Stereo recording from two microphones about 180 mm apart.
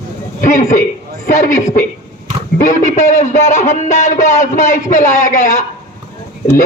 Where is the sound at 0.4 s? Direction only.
45° left (ahead or behind).